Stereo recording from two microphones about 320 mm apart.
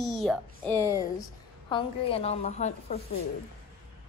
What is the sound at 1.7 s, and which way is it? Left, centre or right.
A woman's voice, centre.